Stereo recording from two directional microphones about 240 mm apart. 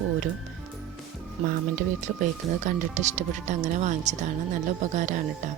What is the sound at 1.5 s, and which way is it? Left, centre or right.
Speech, right.